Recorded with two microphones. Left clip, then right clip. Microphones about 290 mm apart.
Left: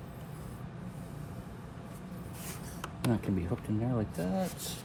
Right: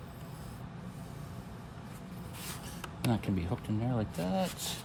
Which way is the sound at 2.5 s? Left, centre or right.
Centre.